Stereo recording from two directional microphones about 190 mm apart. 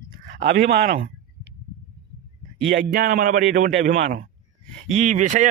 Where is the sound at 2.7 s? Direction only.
50° right (ahead or behind).